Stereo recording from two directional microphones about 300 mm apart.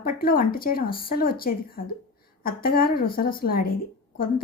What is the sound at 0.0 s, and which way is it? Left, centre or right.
A woman's voice, left.